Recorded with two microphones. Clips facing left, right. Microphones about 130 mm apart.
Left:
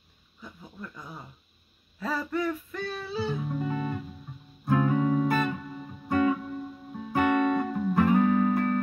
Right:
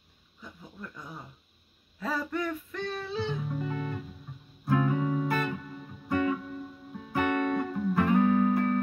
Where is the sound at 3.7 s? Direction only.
30° left (ahead or behind).